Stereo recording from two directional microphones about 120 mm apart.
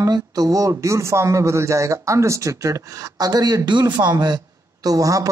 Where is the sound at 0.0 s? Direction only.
30° right (ahead or behind).